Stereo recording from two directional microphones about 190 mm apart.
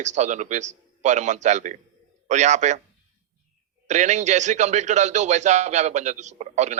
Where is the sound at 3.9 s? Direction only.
40° right (ahead or behind).